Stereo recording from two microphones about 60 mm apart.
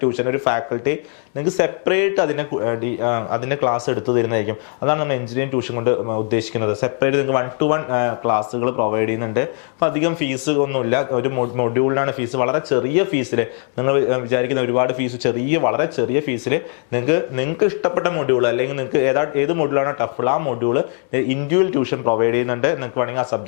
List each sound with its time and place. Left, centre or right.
0.0 s speech: left